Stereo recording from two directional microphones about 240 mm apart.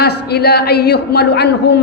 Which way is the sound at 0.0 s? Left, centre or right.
Left.